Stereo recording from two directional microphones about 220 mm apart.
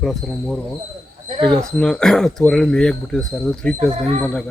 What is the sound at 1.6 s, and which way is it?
Speech, 5° left (ahead or behind).